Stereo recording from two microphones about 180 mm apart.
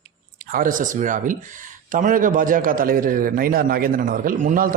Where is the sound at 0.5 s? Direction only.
50° right (ahead or behind).